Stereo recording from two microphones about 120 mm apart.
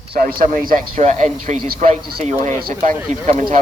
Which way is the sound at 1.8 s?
70° right (ahead or behind).